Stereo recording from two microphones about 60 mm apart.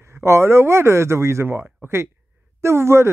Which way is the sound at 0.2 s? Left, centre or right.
Right.